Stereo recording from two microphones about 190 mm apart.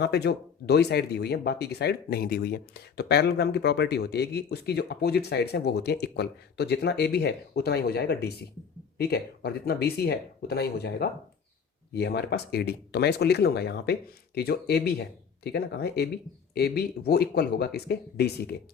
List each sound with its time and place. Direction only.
0.0 s speech: 60° left (ahead or behind)